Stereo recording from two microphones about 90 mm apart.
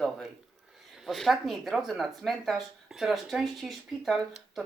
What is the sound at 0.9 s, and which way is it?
Speech, centre (ahead or behind).